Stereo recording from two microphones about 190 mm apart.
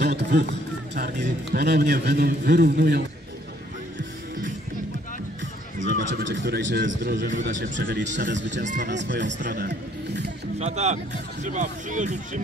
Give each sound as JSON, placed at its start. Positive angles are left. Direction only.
{"t": 0.2, "sound": "a man's voice", "side_deg": -65}
{"t": 5.8, "sound": "a sound", "side_deg": -45}
{"t": 6.0, "sound": "a man's voice", "side_deg": -75}
{"t": 8.0, "sound": "speech", "side_deg": -40}
{"t": 8.3, "sound": "a man's voice", "side_deg": -70}
{"t": 8.6, "sound": "speech", "side_deg": -45}
{"t": 8.9, "sound": "a man's voice", "side_deg": -70}
{"t": 9.4, "sound": "music", "side_deg": -50}
{"t": 10.6, "sound": "speech", "side_deg": -35}